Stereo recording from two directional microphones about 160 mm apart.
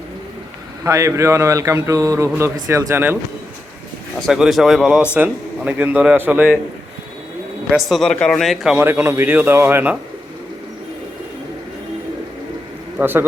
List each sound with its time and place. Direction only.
0.9 s a man's voice: 20° right (ahead or behind)
4.3 s a man's voice: centre (ahead or behind)
7.7 s a man's voice: centre (ahead or behind)
8.8 s a man's voice: 15° right (ahead or behind)
13.0 s a man's voice: 15° right (ahead or behind)